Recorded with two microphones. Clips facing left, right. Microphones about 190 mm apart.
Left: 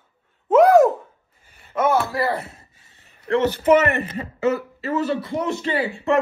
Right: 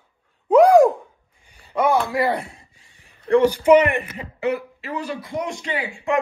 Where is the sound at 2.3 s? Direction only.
5° left (ahead or behind).